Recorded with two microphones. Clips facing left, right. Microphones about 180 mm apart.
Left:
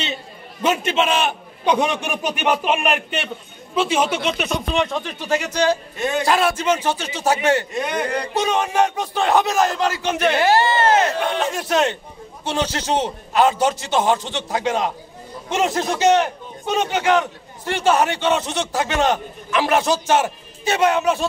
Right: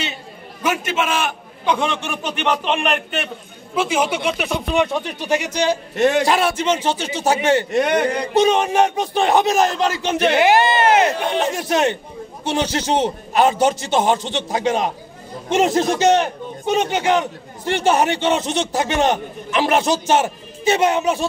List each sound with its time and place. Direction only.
0.6 s a man's voice: 25° left (ahead or behind); by 3.3 s centre (ahead or behind)
3.7 s speech: 10° right (ahead or behind)
5.9 s a man's voice: 75° right (ahead or behind)
6.2 s a man's voice: 20° right (ahead or behind)
7.7 s a man's voice: 70° right (ahead or behind)
8.1 s a man's voice: 20° right (ahead or behind)